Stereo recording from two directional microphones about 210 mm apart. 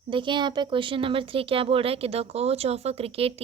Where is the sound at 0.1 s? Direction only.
20° right (ahead or behind).